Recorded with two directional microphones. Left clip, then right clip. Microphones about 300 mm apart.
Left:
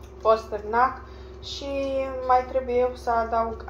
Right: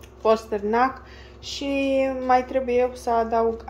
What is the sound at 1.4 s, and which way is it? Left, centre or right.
A woman's voice, right.